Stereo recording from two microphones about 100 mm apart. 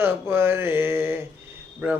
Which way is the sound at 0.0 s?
25° right (ahead or behind).